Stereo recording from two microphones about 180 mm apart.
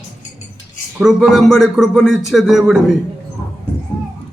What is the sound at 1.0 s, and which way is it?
A man's voice, centre (ahead or behind).